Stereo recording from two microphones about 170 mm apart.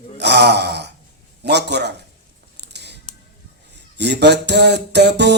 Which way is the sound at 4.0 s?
80° right.